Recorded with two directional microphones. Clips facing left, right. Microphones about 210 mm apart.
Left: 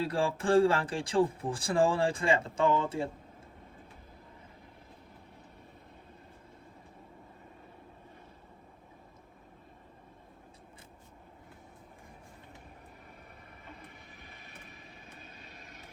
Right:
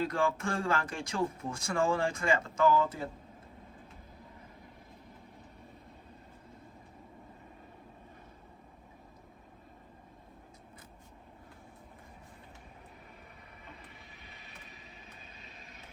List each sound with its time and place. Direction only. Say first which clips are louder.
0.0 s a man's voice: left 1 dB; 30° left (ahead or behind)
14.2 s vehicle: left 1 dB; 50° left (ahead or behind)